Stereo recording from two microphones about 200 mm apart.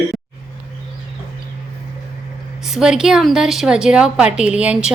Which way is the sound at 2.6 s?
5° right (ahead or behind).